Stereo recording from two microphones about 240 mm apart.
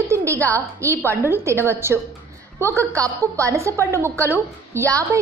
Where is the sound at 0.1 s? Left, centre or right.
Centre.